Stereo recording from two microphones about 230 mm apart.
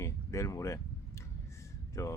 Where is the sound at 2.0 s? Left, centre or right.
Centre.